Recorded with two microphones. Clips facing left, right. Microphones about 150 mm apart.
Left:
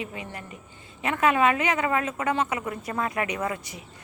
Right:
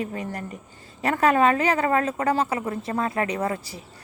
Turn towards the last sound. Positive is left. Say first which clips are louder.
# right 3 dB
turn(degrees=-30)  # may be behind; listen again after turning